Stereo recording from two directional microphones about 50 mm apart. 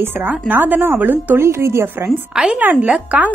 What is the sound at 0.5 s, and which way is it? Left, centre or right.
Speech, right.